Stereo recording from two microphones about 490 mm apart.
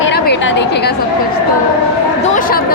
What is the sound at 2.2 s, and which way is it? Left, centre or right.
Speech, centre.